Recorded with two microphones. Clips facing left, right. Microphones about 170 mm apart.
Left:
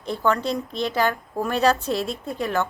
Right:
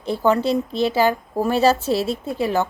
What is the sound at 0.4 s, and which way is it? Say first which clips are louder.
A woman's voice: right 6 dB; 5° right (ahead or behind).